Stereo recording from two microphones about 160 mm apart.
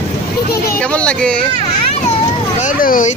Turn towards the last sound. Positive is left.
turn(degrees=55)  # may be behind; listen again after turning